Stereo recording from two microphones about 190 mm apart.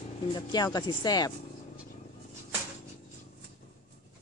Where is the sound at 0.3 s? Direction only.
20° left (ahead or behind).